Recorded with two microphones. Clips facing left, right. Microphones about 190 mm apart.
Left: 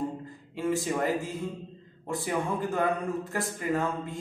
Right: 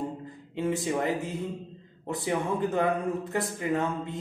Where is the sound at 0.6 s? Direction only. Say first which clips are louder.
Even; 20° right (ahead or behind).